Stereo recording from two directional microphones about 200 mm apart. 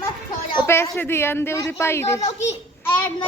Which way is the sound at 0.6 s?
10° left (ahead or behind).